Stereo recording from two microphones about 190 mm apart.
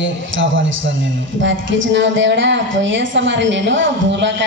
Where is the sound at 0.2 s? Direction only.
80° right.